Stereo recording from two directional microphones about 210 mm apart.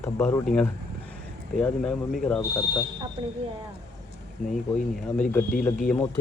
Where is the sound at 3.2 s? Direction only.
25° right (ahead or behind).